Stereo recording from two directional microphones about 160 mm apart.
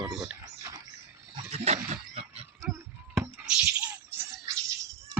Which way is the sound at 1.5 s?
40° right (ahead or behind).